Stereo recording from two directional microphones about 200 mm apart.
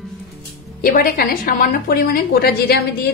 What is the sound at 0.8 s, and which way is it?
A woman's voice, 45° left (ahead or behind).